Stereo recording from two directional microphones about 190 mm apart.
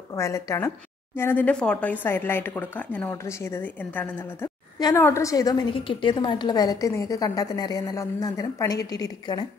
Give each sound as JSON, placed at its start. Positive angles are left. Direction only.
{"t": 0.1, "sound": "a woman's voice", "side_deg": 15}
{"t": 4.7, "sound": "a woman's voice", "side_deg": 20}